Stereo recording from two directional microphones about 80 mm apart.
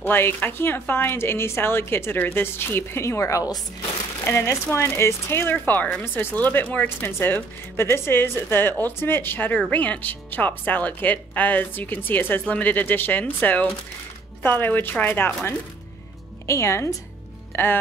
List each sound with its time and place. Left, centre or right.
0.0 s speech: left
4.2 s speech: left
16.4 s a woman's voice: left
17.5 s music: left